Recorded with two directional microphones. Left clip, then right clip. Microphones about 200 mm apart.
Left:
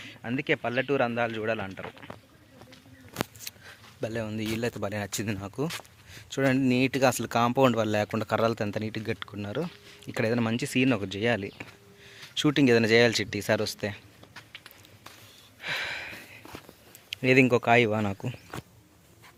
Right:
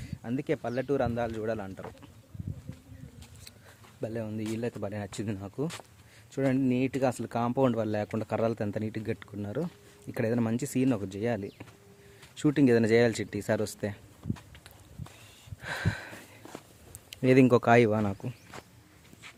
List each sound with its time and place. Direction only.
0.2 s speech: 5° right (ahead or behind)
3.4 s a sound: 5° right (ahead or behind)
4.0 s speech: centre (ahead or behind)
15.6 s a sound: 25° right (ahead or behind)
17.1 s speech: 20° right (ahead or behind)
17.9 s speech: 10° right (ahead or behind)